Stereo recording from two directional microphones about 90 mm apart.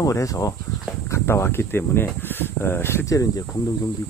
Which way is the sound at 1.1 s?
25° left (ahead or behind).